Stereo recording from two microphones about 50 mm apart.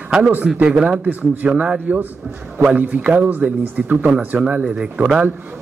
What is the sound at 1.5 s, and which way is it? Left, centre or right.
A man's voice, right.